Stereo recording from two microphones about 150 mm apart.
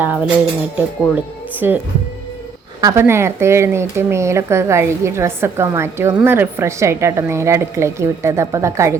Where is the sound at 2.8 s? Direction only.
15° right (ahead or behind).